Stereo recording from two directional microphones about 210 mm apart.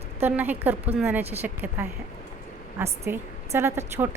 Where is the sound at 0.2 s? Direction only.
10° right (ahead or behind).